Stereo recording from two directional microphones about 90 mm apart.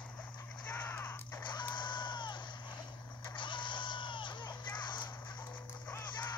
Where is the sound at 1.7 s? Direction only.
55° left (ahead or behind).